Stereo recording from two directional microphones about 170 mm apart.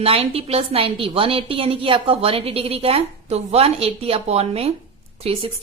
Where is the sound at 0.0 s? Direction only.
35° right (ahead or behind).